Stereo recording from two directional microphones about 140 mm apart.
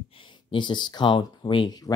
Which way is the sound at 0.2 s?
35° left (ahead or behind).